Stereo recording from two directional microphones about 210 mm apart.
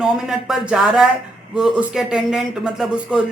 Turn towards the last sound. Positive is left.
turn(degrees=-5)  # may be behind; listen again after turning